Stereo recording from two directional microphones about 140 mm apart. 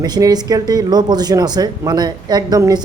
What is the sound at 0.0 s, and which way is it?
A man's voice, 30° right (ahead or behind).